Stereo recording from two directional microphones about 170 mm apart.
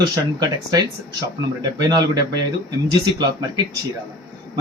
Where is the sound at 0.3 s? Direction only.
25° right (ahead or behind).